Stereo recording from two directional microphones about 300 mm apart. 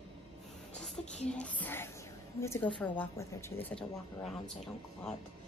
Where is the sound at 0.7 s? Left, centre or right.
Centre.